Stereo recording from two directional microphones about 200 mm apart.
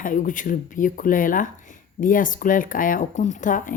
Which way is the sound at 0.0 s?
40° left (ahead or behind).